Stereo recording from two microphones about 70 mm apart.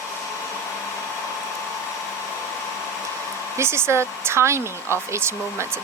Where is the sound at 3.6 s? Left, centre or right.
Right.